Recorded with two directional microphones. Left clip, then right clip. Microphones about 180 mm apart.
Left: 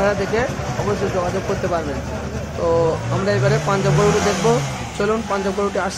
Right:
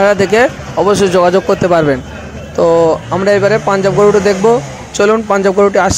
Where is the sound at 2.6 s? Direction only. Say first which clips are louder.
Right 9 dB; 35° right (ahead or behind).